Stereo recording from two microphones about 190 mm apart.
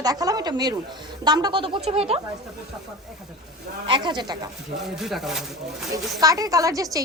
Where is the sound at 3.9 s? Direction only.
25° right (ahead or behind).